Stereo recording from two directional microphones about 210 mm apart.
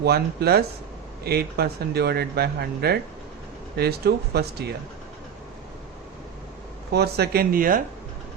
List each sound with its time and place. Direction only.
0.0 s speech: 50° right (ahead or behind)
6.9 s speech: 50° right (ahead or behind)